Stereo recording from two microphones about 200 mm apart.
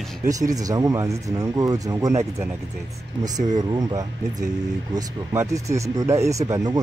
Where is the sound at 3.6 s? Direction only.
20° right (ahead or behind).